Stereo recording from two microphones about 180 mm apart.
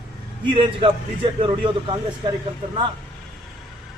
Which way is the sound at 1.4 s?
25° right (ahead or behind).